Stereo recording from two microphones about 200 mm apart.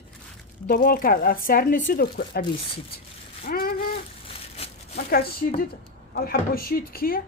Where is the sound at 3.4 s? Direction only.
50° left (ahead or behind).